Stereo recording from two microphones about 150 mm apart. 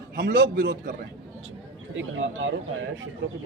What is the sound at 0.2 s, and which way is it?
Speech, 80° right.